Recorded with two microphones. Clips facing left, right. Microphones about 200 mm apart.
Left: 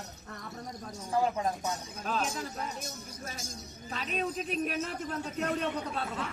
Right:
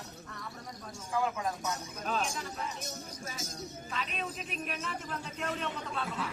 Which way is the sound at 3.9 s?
40° left (ahead or behind).